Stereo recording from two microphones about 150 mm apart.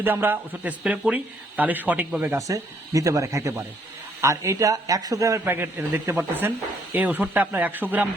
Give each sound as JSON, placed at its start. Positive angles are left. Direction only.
{"t": 0.0, "sound": "a man's voice", "side_deg": -15}